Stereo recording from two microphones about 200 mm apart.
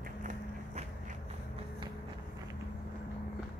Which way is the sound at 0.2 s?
40° right (ahead or behind).